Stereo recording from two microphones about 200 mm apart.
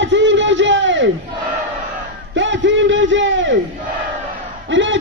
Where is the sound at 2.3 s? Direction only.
65° right (ahead or behind).